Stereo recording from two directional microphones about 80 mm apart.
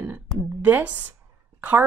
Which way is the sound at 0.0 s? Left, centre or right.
Right.